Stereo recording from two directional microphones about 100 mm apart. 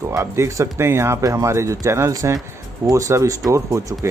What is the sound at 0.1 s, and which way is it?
Speech, 30° right (ahead or behind).